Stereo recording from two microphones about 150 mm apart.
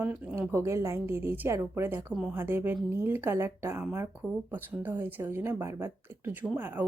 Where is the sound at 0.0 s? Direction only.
10° right (ahead or behind).